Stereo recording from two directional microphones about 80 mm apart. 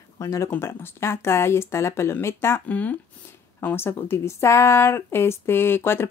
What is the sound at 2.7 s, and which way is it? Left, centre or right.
Speech, centre.